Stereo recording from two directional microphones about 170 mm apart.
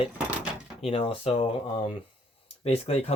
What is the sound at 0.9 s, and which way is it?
Speech, 35° left (ahead or behind).